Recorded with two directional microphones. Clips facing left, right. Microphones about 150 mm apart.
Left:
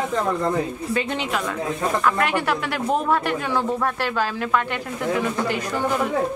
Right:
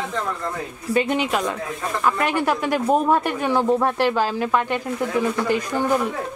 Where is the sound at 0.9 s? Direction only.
15° right (ahead or behind).